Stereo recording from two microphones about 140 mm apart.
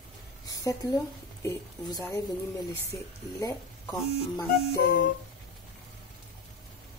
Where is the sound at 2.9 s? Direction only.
20° left (ahead or behind).